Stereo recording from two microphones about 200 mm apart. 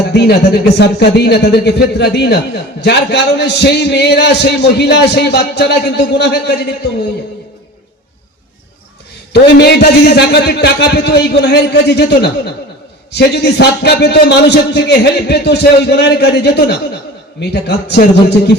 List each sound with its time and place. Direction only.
0.1 s speech: 55° left (ahead or behind)
9.3 s speech: 55° left (ahead or behind)